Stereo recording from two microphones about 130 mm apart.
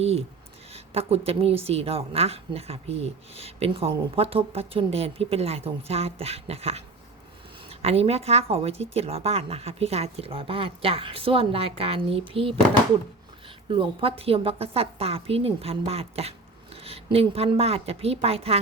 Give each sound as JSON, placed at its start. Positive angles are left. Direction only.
{"t": 0.0, "sound": "a woman's voice", "side_deg": -55}
{"t": 13.7, "sound": "a woman's voice", "side_deg": -45}